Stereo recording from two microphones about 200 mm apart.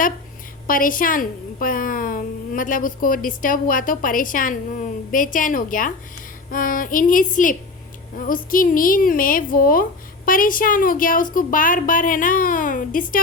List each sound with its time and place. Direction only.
0.7 s a woman's voice: 45° left (ahead or behind)